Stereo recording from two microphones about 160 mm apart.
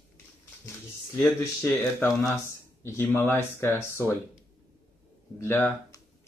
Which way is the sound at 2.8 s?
15° left (ahead or behind).